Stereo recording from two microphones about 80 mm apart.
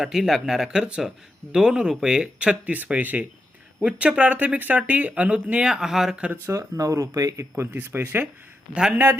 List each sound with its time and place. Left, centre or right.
0.0 s speech: centre
6.5 s speech: right
7.5 s speech: right
8.7 s speech: centre